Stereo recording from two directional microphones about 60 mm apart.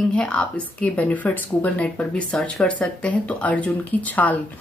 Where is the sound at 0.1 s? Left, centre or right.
Centre.